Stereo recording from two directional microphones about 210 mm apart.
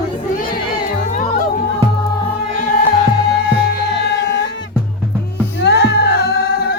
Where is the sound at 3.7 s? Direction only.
55° left (ahead or behind).